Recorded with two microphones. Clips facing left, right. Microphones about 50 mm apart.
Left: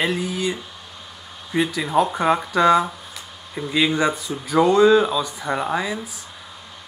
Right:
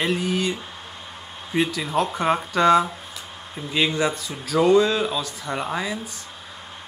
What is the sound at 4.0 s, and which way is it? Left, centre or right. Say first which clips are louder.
Speech: left 3 dB; centre.